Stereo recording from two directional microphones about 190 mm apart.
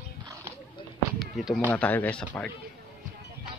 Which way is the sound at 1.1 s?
Centre (ahead or behind).